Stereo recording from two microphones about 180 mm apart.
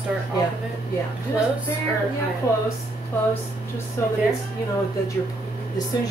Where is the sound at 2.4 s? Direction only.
20° left (ahead or behind).